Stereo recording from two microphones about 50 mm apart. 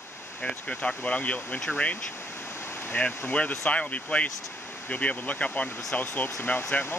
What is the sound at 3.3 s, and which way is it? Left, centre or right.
Speech, left.